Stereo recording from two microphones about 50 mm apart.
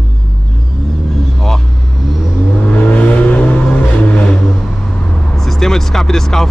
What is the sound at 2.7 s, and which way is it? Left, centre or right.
Vehicle, left.